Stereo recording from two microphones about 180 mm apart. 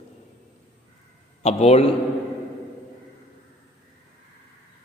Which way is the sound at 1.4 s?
35° left (ahead or behind).